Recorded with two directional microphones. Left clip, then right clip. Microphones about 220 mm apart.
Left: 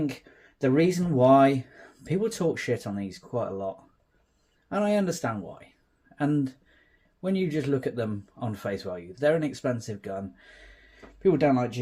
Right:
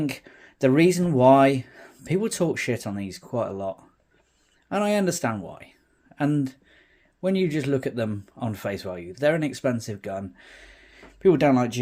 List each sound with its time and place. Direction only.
0.0 s speech: 35° right (ahead or behind)